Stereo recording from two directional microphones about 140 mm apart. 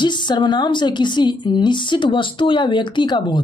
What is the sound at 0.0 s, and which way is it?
A woman's voice, 35° left (ahead or behind).